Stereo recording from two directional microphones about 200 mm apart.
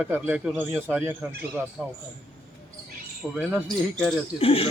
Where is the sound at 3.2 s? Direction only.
Centre (ahead or behind).